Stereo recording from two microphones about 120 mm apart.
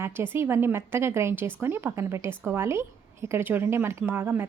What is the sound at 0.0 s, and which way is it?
A woman's voice, 20° right (ahead or behind).